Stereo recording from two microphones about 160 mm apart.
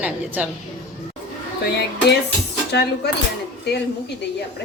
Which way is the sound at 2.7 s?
90° left.